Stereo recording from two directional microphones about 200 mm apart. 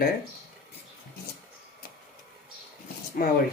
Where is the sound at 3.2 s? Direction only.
45° left (ahead or behind).